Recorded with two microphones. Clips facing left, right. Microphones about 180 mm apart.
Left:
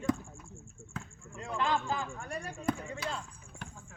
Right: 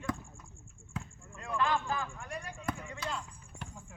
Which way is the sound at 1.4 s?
20° left (ahead or behind).